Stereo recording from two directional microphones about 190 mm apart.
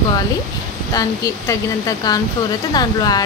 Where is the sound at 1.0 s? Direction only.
15° left (ahead or behind).